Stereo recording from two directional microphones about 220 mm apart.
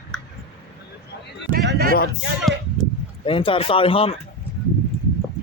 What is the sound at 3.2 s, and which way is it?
Speech, 25° left (ahead or behind).